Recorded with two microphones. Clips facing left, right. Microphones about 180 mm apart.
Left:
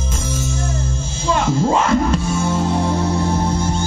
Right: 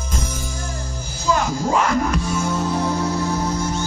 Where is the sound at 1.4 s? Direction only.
25° left (ahead or behind).